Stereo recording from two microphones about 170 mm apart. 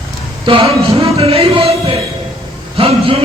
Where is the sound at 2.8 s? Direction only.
35° right (ahead or behind).